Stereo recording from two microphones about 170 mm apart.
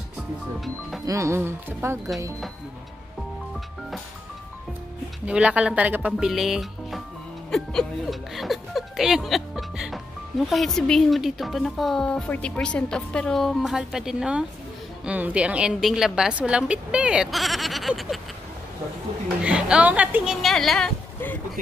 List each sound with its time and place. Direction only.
1.0 s a woman's voice: 20° right (ahead or behind)
5.2 s a woman's voice: 5° right (ahead or behind)
19.4 s a woman's voice: 5° right (ahead or behind)
20.4 s speech: centre (ahead or behind)